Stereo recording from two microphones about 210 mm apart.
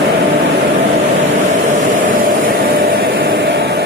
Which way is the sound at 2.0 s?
65° right (ahead or behind).